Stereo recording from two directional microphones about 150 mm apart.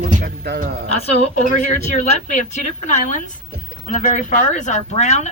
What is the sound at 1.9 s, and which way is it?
A woman's voice, 50° left (ahead or behind).